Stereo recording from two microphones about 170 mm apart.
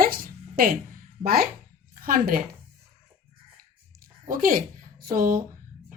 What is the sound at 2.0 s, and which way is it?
Speech, 60° right (ahead or behind).